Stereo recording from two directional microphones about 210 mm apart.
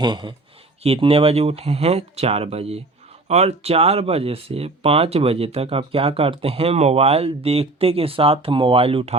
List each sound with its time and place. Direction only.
0.0 s speech: 20° right (ahead or behind)